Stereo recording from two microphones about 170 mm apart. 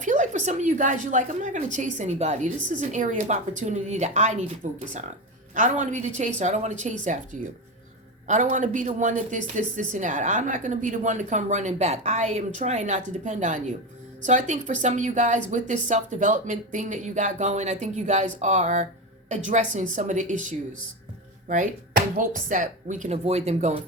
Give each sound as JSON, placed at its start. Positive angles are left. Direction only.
{"t": 0.0, "sound": "speech", "side_deg": -45}
{"t": 8.3, "sound": "speech", "side_deg": -45}